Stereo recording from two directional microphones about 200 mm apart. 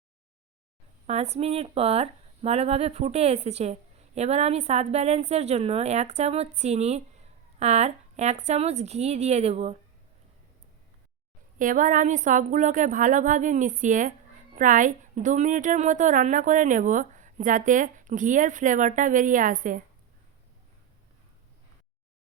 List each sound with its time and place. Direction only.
1.0 s speech: 35° right (ahead or behind)
11.6 s speech: 40° right (ahead or behind)